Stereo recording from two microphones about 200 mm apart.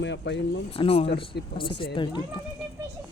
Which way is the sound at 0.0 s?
65° left (ahead or behind).